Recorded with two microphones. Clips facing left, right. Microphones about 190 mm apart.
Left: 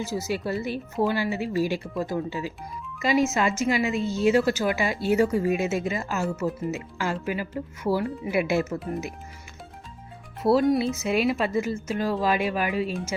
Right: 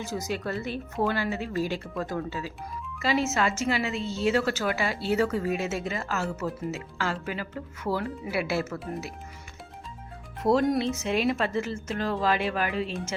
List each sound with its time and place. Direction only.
0.0 s a woman's voice: 10° left (ahead or behind)
10.4 s a woman's voice: 5° left (ahead or behind)